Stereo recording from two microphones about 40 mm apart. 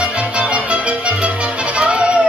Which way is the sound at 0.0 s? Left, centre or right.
Right.